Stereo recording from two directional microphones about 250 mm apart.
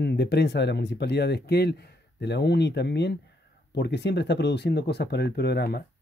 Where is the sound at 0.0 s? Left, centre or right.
Left.